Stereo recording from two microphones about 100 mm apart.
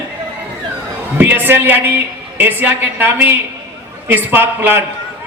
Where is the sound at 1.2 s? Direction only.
20° right (ahead or behind).